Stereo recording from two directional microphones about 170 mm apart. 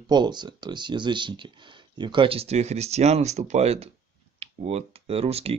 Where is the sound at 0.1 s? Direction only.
25° right (ahead or behind).